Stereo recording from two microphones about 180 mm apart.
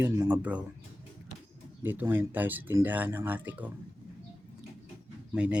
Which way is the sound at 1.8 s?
10° right (ahead or behind).